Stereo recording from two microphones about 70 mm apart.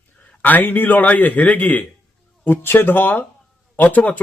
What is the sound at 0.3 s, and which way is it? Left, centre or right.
Speech, left.